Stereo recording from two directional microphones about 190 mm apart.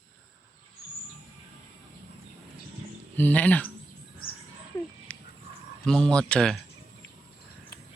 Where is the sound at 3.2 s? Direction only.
10° left (ahead or behind).